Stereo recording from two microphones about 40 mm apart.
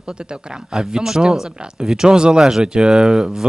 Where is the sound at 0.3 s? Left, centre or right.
Centre.